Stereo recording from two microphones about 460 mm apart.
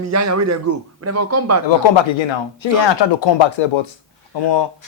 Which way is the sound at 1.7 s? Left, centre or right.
Left.